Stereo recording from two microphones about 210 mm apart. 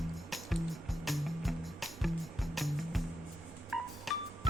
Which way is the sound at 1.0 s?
Centre (ahead or behind).